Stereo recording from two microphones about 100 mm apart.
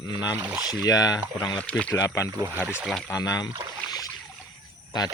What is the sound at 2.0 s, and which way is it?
Speech, 30° left (ahead or behind).